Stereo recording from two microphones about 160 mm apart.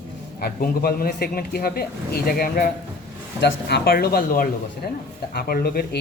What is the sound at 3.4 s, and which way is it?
Speech, 90° left.